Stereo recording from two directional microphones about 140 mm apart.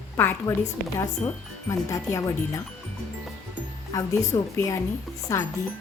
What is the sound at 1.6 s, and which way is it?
Speech, 25° left (ahead or behind).